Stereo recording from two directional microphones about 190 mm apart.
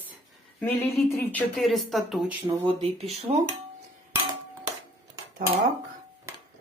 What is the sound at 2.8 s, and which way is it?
Speech, 30° right (ahead or behind).